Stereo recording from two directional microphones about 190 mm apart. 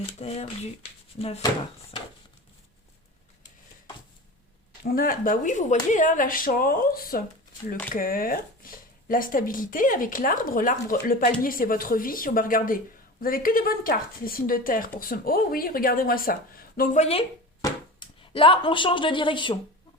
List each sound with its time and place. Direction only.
0.2 s speech: 35° left (ahead or behind)
4.8 s speech: 50° left (ahead or behind); by 19.5 s 25° left (ahead or behind)